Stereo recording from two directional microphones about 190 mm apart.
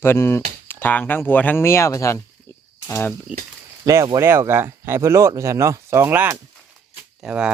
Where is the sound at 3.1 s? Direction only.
5° right (ahead or behind).